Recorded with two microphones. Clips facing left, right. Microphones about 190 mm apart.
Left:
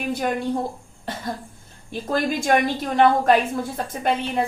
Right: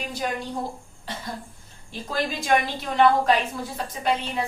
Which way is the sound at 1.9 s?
50° left (ahead or behind).